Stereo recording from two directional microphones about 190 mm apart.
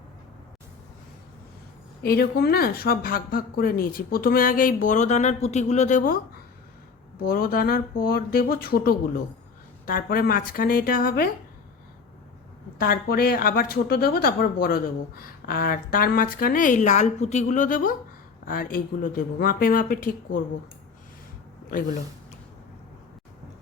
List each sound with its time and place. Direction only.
2.0 s speech: 55° left (ahead or behind)
12.8 s speech: 50° left (ahead or behind)